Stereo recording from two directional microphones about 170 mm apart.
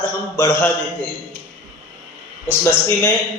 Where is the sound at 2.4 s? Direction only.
15° left (ahead or behind).